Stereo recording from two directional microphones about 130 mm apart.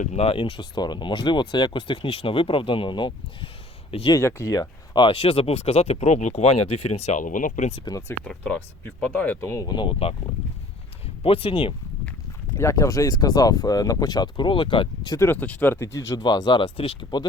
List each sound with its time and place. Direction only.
0.0 s speech: 60° left (ahead or behind); by 3.5 s 40° left (ahead or behind)
4.1 s speech: 20° left (ahead or behind)
4.9 s speech: 45° left (ahead or behind); by 7.7 s 80° left
7.9 s speech: 25° left (ahead or behind)
8.2 s speech: 5° left (ahead or behind); by 10.2 s 45° left (ahead or behind)
11.2 s speech: 45° left (ahead or behind)
12.5 s speech: 25° left (ahead or behind); by 15.1 s 40° left (ahead or behind)
15.1 s speech: 20° left (ahead or behind); by 17.2 s 40° left (ahead or behind)